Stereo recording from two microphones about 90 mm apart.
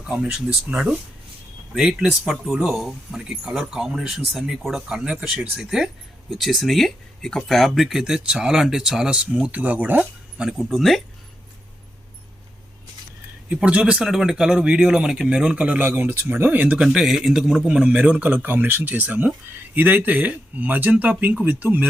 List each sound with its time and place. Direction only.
0.0 s a man's voice: 5° right (ahead or behind)
10.4 s speech: centre (ahead or behind)
13.5 s a man's voice: 15° right (ahead or behind)